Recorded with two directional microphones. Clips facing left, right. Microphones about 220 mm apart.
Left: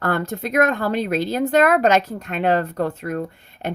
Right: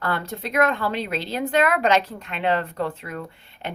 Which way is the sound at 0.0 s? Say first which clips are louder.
Left 5 dB; 50° left (ahead or behind).